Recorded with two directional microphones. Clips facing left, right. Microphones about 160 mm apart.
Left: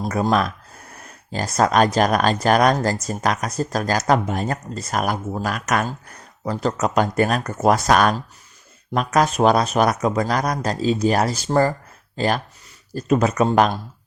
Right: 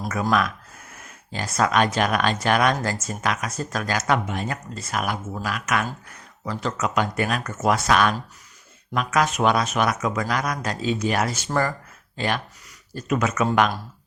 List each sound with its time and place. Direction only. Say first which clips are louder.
0.0 s speech: left 3 dB; 30° left (ahead or behind)